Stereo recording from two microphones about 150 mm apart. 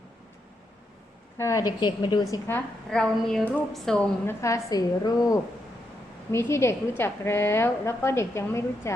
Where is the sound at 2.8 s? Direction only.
5° left (ahead or behind).